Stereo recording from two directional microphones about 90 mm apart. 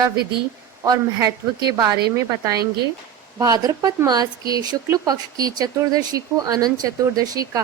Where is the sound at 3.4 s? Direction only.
45° right (ahead or behind).